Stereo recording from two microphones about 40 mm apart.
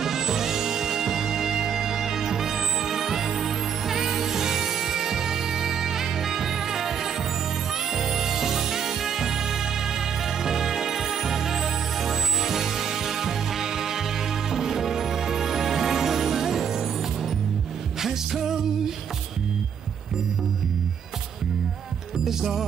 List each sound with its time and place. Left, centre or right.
0.0 s music: centre
7.9 s music: centre
18.0 s music: centre
22.2 s music: centre